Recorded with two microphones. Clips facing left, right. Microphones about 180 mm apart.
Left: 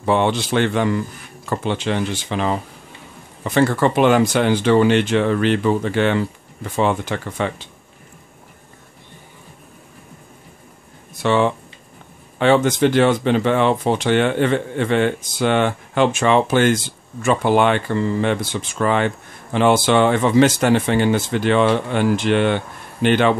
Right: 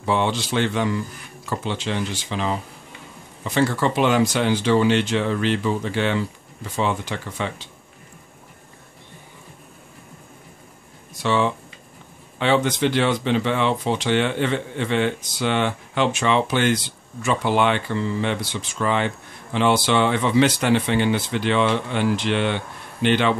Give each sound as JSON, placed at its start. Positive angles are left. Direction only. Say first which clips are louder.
{"t": 0.0, "sound": "speech", "louder": "left 4 dB", "side_deg": 55}
{"t": 11.2, "sound": "speech", "louder": "left 4 dB", "side_deg": 55}